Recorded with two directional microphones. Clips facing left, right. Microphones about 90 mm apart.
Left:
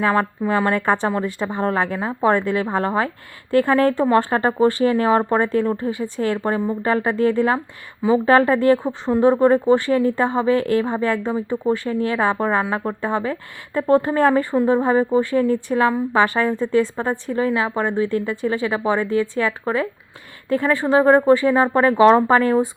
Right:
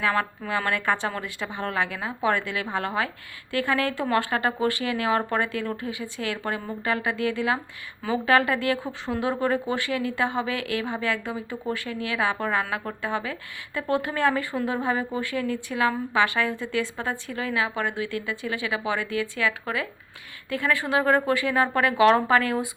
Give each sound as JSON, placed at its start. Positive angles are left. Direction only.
{"t": 0.1, "sound": "a woman's voice", "side_deg": 35}